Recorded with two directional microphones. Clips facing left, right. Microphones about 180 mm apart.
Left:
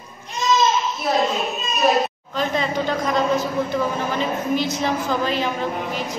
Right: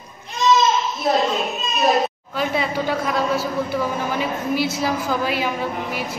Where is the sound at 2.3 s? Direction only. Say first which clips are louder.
Left 1 dB; 10° right (ahead or behind).